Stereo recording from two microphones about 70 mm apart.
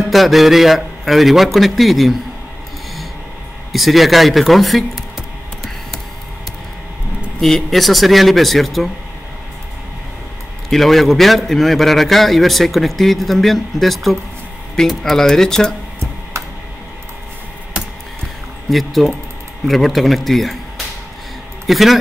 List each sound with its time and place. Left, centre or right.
0.1 s a man's voice: centre
3.7 s a sound: centre
7.3 s a man's voice: centre
10.7 s a man's voice: centre
16.3 s tick-tock: right
18.7 s a man's voice: centre